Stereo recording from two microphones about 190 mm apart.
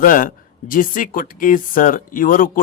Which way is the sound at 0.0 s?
45° left (ahead or behind).